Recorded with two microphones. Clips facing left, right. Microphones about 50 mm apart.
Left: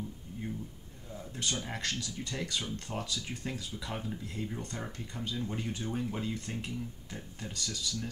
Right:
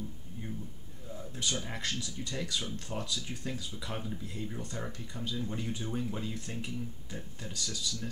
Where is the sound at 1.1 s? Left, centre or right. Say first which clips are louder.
Even; centre.